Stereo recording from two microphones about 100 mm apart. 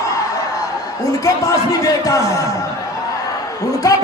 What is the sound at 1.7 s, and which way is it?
Speech, 35° left (ahead or behind).